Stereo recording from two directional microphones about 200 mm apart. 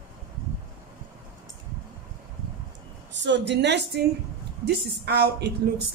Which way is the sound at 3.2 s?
65° right (ahead or behind).